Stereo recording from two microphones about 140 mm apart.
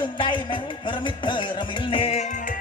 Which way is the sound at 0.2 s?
35° left (ahead or behind).